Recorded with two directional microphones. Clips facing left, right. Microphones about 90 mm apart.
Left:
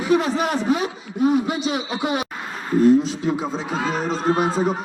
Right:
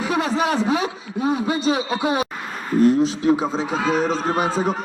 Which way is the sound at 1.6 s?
30° right (ahead or behind).